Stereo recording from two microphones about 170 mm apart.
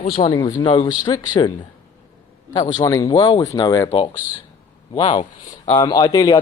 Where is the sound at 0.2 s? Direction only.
25° left (ahead or behind).